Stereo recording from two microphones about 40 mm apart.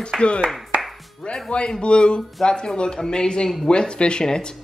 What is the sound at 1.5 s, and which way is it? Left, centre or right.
Speech, left.